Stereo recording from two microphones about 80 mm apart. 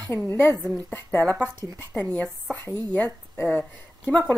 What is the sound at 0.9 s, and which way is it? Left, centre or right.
Speech, centre.